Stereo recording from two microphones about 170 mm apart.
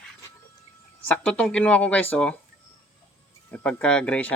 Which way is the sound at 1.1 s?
5° left (ahead or behind).